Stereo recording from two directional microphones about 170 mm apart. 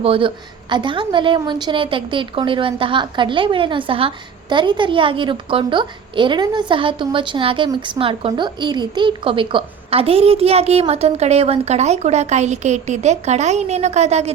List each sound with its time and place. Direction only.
0.0 s a woman's voice: 30° right (ahead or behind)